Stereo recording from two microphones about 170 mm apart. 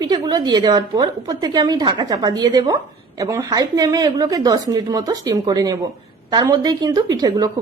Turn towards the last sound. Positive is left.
turn(degrees=-20)  # may be behind; listen again after turning